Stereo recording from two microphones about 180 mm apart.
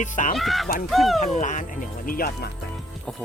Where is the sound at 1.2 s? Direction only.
45° left (ahead or behind).